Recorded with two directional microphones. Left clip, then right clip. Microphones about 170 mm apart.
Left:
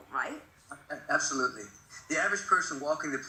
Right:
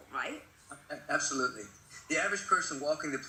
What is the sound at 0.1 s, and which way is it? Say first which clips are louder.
Speech: left 3 dB; 25° right (ahead or behind).